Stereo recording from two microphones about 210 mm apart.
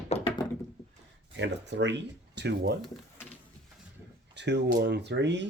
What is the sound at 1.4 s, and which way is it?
Speech, 55° right (ahead or behind).